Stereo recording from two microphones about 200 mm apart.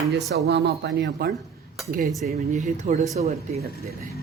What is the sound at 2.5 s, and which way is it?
Speech, 35° right (ahead or behind).